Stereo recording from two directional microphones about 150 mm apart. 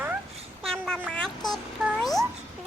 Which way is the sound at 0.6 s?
5° left (ahead or behind).